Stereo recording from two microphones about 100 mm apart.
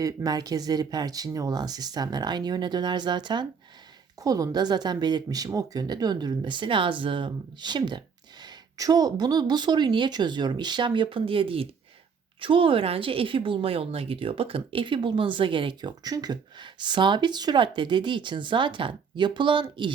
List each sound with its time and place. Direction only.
0.0 s speech: 40° right (ahead or behind)
4.2 s speech: 40° right (ahead or behind); by 19.6 s 55° right (ahead or behind)